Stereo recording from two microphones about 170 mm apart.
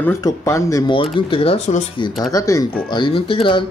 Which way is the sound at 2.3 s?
20° left (ahead or behind).